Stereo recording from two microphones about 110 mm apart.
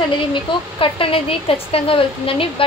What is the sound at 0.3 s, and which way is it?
A woman's voice, 55° left (ahead or behind).